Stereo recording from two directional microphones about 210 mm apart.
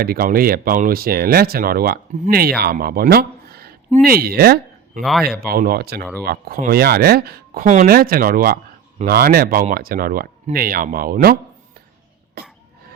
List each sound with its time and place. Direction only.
0.0 s speech: 45° right (ahead or behind)
4.9 s speech: centre (ahead or behind)
5.5 s speech: 45° right (ahead or behind)